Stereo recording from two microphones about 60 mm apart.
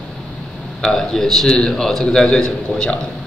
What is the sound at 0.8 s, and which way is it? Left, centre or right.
A man's voice, centre.